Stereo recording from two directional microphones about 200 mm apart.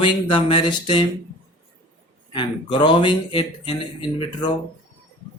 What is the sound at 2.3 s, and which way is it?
Speech, 25° left (ahead or behind).